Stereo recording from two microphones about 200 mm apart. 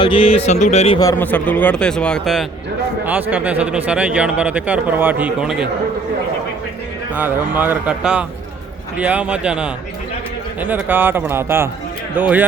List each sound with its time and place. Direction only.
0.0 s speech: 25° left (ahead or behind)
0.9 s a man's voice: 15° left (ahead or behind); by 5.6 s 5° right (ahead or behind)
7.1 s a man's voice: 10° right (ahead or behind)